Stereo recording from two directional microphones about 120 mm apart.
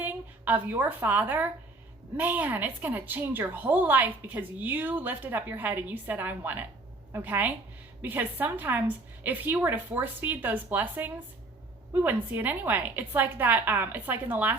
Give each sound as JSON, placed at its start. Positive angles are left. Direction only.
{"t": 0.0, "sound": "a woman's voice", "side_deg": -15}